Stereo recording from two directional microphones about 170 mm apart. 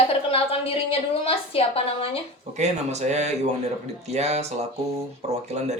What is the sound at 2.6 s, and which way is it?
Speech, 40° right (ahead or behind).